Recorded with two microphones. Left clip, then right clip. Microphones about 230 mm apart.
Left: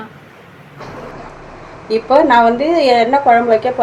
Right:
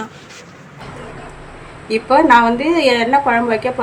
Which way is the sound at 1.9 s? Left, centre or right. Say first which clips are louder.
Even; right.